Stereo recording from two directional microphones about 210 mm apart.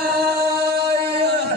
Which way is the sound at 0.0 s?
50° right (ahead or behind).